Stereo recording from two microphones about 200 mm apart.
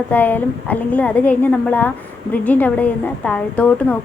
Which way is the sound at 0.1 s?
10° left (ahead or behind).